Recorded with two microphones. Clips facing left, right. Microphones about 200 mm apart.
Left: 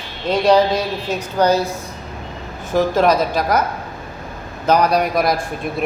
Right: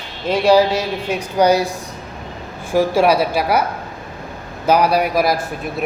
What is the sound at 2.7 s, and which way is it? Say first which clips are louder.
Speech: right 1 dB; 10° right (ahead or behind).